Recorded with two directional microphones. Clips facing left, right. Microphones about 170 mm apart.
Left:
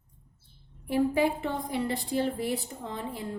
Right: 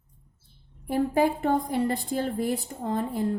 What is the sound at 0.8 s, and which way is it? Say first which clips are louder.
A woman's voice: right 2 dB; 45° right (ahead or behind).